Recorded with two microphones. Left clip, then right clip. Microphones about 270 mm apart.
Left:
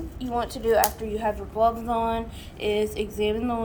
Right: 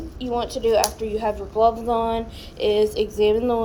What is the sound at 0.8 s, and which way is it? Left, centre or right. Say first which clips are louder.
Speech: right 2 dB; centre.